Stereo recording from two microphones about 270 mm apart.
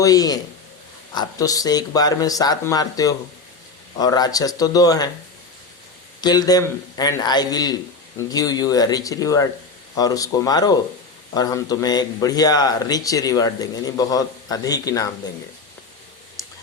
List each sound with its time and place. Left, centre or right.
0.0 s speech: centre
6.2 s speech: centre